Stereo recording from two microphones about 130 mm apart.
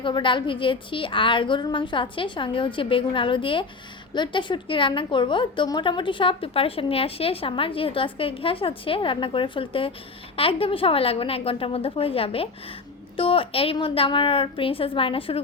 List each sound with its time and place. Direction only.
0.0 s a woman's voice: 40° left (ahead or behind)